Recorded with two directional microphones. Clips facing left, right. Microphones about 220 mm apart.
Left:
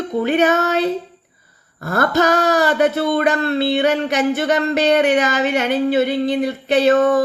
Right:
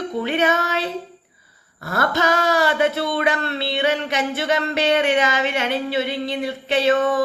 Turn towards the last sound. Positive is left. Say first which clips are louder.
# left 4 dB
turn(degrees=45)  # may be behind; listen again after turning